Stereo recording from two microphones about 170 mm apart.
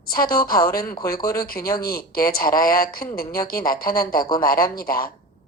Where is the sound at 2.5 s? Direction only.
20° left (ahead or behind).